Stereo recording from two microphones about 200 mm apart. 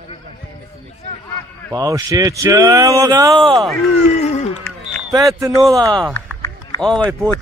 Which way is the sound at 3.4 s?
Centre (ahead or behind).